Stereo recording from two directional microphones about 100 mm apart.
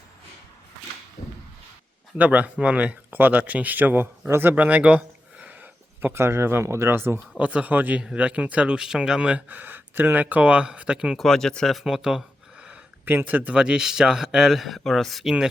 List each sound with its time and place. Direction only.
2.1 s a man's voice: 15° right (ahead or behind)
11.3 s speech: 5° left (ahead or behind)